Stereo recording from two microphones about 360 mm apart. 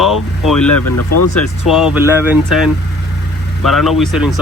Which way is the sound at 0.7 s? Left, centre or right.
Left.